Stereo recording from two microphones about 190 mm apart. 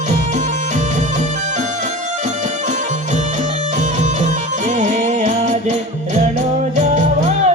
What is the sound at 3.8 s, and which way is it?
Music, 40° right (ahead or behind).